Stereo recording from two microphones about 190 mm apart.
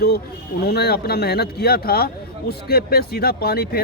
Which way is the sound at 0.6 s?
55° left (ahead or behind).